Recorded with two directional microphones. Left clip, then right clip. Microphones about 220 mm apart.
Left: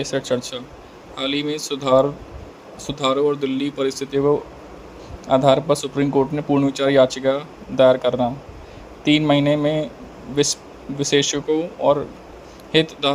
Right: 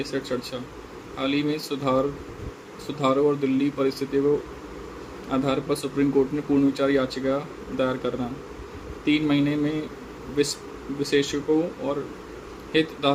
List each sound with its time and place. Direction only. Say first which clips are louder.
0.0 s speech: left 6 dB; 35° left (ahead or behind)
5.3 s speech: left 10 dB; 35° left (ahead or behind)